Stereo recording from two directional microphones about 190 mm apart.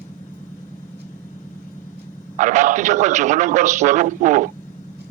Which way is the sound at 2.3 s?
40° right (ahead or behind).